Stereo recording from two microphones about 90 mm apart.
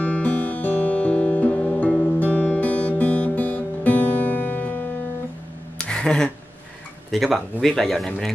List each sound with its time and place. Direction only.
0.0 s guitar: 15° left (ahead or behind)
5.8 s a sound: 10° left (ahead or behind)
7.1 s speech: centre (ahead or behind)